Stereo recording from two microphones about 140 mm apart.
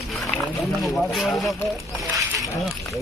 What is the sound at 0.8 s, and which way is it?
Speech, centre (ahead or behind).